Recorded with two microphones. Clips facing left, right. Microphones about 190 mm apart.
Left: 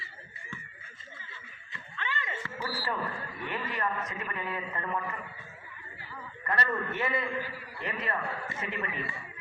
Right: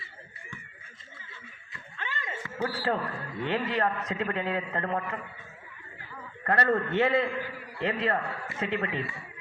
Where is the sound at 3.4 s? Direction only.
80° right.